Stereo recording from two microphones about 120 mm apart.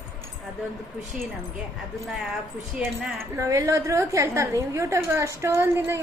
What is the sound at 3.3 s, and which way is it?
A woman's voice, 25° right (ahead or behind).